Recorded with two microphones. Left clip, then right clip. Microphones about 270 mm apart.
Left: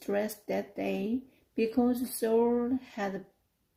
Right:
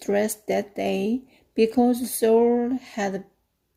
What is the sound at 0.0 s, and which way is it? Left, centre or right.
A woman's voice, right.